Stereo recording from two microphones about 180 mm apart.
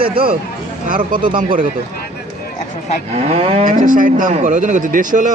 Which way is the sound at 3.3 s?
35° right (ahead or behind).